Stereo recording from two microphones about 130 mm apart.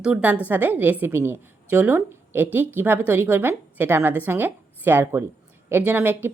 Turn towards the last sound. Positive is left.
turn(degrees=-15)  # may be behind; listen again after turning